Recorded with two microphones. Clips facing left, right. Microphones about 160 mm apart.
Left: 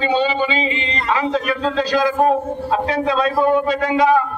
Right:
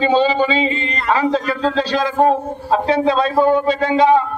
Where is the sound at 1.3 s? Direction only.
30° right (ahead or behind).